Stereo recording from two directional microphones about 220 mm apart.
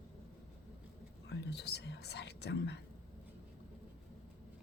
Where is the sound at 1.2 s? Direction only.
50° left (ahead or behind).